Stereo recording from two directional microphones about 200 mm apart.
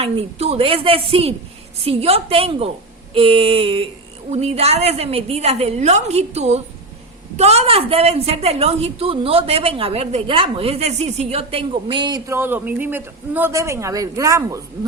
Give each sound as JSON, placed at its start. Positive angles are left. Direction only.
{"t": 0.0, "sound": "a woman's voice", "side_deg": -30}